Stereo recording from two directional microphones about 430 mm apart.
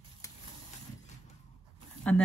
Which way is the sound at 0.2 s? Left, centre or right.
Centre.